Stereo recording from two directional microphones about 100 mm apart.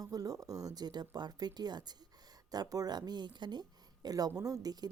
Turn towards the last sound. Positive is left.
turn(degrees=-40)  # may be behind; listen again after turning